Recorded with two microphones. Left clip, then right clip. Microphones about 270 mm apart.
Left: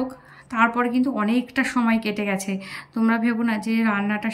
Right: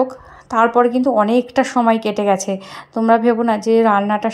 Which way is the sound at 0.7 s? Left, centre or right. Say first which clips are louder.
Right 9 dB; centre.